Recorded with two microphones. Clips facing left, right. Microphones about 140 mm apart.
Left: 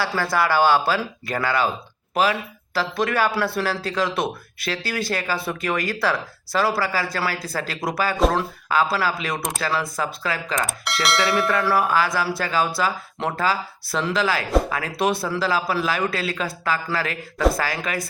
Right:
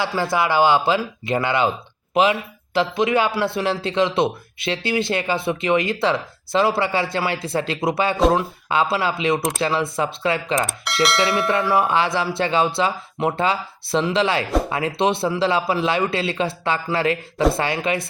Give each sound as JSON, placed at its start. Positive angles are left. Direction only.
{"t": 0.0, "sound": "speech", "side_deg": -20}
{"t": 2.7, "sound": "speech", "side_deg": -20}
{"t": 10.7, "sound": "speech", "side_deg": 0}
{"t": 11.5, "sound": "speech", "side_deg": -20}